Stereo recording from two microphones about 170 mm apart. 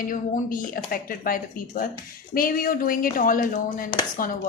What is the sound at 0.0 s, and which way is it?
A woman's voice, 55° left (ahead or behind).